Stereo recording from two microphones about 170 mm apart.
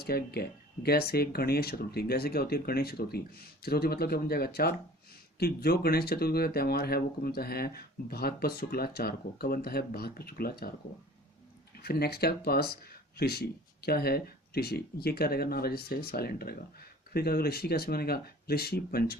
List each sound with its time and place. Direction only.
0.0 s speech: 65° left (ahead or behind)
11.8 s speech: 65° left (ahead or behind)